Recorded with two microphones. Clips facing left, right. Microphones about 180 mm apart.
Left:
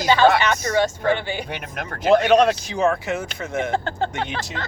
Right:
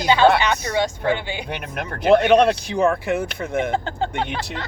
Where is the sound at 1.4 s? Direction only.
55° right (ahead or behind).